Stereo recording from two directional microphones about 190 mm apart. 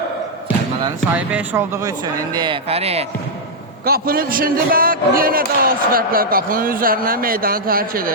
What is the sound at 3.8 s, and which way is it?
Speech, 50° right (ahead or behind).